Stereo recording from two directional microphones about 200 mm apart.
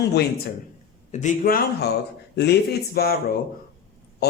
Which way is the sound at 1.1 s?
40° left (ahead or behind).